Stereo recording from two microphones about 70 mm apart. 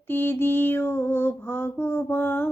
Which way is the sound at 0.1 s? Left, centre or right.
Left.